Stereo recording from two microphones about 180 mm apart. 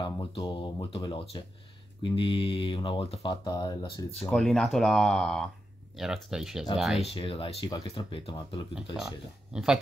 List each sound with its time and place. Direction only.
0.0 s speech: 30° left (ahead or behind)
4.3 s speech: centre (ahead or behind)
7.0 s speech: 30° left (ahead or behind)
8.9 s speech: 5° right (ahead or behind)